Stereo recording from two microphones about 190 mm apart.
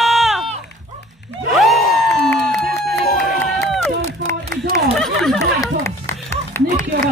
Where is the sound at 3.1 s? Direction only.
45° left (ahead or behind).